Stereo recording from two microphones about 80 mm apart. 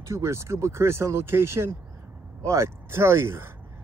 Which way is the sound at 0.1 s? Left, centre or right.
Right.